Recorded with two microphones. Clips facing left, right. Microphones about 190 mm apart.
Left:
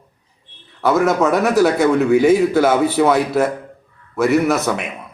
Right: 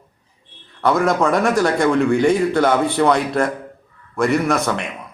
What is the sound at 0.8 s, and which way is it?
A man's voice, 5° left (ahead or behind).